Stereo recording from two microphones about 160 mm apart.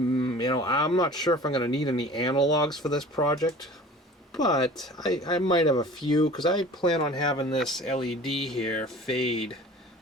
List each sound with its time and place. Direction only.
0.2 s speech: 30° left (ahead or behind)
2.6 s speech: centre (ahead or behind)
3.2 s speech: 25° left (ahead or behind)
7.6 s speech: centre (ahead or behind)